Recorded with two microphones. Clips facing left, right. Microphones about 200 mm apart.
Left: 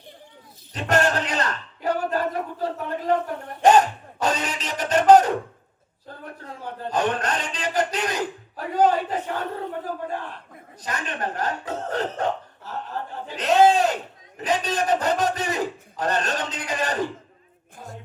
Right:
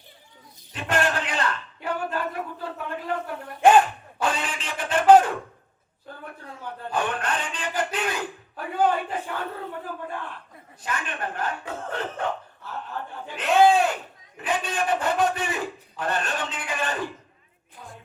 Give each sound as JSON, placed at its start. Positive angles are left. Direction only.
{"t": 0.7, "sound": "a man's voice", "side_deg": 40}
{"t": 6.8, "sound": "a man's voice", "side_deg": 40}
{"t": 17.7, "sound": "music", "side_deg": 40}